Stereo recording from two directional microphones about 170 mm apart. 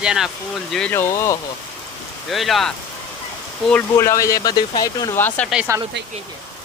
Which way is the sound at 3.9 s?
15° left (ahead or behind).